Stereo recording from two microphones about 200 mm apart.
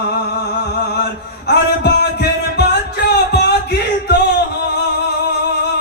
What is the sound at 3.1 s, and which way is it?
Music, 55° left (ahead or behind).